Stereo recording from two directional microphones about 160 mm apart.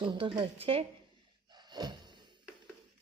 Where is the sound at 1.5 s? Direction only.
25° right (ahead or behind).